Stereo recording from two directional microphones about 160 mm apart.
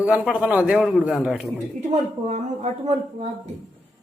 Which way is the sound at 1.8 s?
45° right (ahead or behind).